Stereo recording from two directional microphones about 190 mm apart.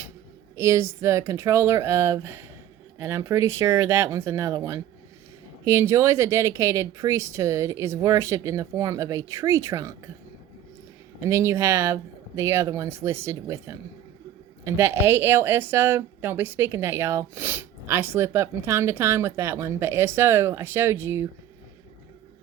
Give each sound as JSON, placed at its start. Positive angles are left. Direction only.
{"t": 0.5, "sound": "speech", "side_deg": -15}
{"t": 11.2, "sound": "speech", "side_deg": -15}